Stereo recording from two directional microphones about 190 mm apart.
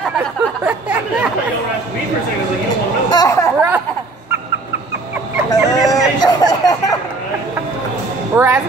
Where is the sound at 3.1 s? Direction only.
20° left (ahead or behind).